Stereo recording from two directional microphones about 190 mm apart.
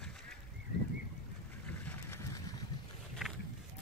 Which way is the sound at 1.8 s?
10° left (ahead or behind).